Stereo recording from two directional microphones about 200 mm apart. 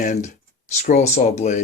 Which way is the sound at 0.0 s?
40° left (ahead or behind).